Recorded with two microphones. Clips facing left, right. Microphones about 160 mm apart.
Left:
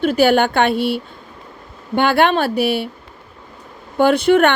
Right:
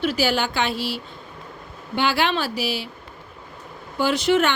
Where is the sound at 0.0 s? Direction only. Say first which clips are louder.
Left 8 dB; 55° left (ahead or behind).